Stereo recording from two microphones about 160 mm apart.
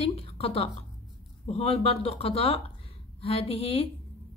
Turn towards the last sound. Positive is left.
turn(degrees=35)  # may be behind; listen again after turning